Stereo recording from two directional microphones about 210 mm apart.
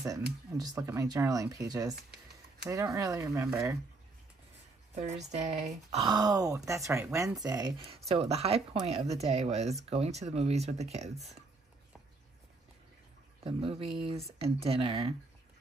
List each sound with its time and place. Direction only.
0.5 s speech: 15° right (ahead or behind)
4.9 s speech: 30° right (ahead or behind)
13.4 s speech: 25° right (ahead or behind)